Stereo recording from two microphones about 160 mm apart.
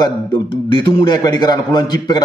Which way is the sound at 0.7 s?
30° left (ahead or behind).